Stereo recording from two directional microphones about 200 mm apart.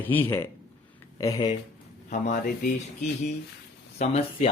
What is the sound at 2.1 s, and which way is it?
Speech, 40° left (ahead or behind).